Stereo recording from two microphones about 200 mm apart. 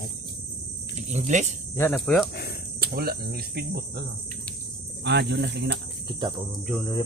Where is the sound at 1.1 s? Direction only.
35° right (ahead or behind).